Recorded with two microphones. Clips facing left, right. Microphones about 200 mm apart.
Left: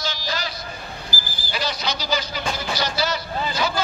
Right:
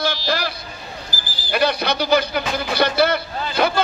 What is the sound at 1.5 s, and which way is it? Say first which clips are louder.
A man's voice: right 8 dB; 60° right (ahead or behind).